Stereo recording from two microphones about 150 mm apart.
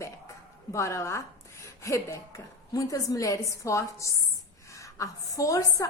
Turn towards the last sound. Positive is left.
turn(degrees=20)  # may be behind; listen again after turning